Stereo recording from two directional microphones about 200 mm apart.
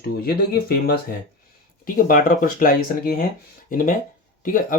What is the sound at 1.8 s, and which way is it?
Speech, 45° left (ahead or behind).